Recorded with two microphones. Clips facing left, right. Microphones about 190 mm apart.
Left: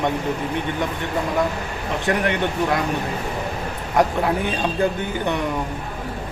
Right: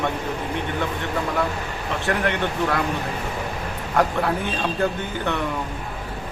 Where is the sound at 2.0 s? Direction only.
15° left (ahead or behind).